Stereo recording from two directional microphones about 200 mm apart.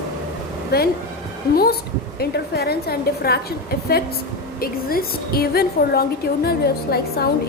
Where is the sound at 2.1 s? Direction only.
50° left (ahead or behind).